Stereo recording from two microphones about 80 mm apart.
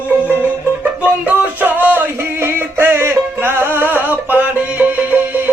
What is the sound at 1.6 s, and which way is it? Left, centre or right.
Music, right.